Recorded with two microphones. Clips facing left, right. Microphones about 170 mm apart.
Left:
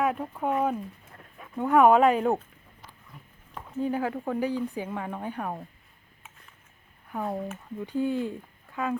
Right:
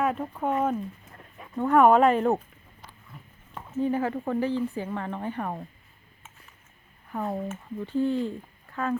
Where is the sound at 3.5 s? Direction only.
5° right (ahead or behind).